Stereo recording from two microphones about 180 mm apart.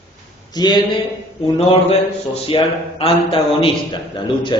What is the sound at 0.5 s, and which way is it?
Speech, 25° left (ahead or behind).